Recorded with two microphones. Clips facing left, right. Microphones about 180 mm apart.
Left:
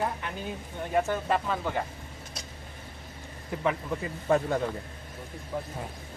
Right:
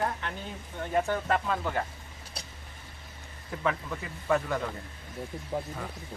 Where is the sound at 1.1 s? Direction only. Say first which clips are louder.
Even; 15° left (ahead or behind).